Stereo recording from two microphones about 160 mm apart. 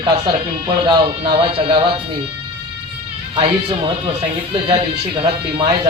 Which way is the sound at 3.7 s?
35° right (ahead or behind).